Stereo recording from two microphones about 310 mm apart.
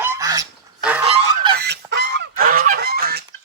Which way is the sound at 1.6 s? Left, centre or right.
Right.